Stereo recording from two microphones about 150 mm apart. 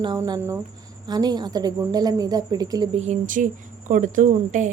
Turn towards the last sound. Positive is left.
turn(degrees=-60)  # may be behind; listen again after turning